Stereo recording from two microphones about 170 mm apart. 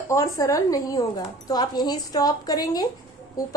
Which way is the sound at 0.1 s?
20° left (ahead or behind).